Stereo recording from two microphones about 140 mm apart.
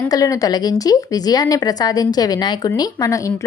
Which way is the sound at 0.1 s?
25° left (ahead or behind).